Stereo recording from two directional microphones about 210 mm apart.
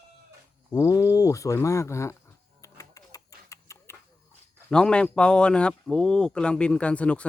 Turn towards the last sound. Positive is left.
turn(degrees=5)  # may be behind; listen again after turning